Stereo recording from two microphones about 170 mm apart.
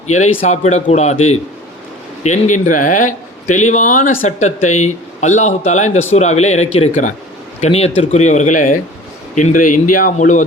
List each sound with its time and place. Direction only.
0.1 s a man's voice: 45° left (ahead or behind)